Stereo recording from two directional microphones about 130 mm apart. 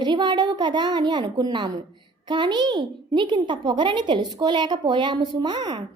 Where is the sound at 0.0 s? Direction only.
35° right (ahead or behind).